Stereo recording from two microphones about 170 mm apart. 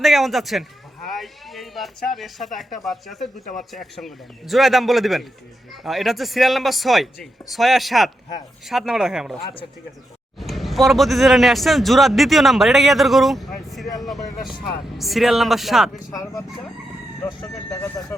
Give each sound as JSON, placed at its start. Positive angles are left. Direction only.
{"t": 0.0, "sound": "a man's voice", "side_deg": 0}
{"t": 3.4, "sound": "speech", "side_deg": 50}
{"t": 3.7, "sound": "a man's voice", "side_deg": 0}
{"t": 10.4, "sound": "a man's voice", "side_deg": 0}
{"t": 16.1, "sound": "speech", "side_deg": 20}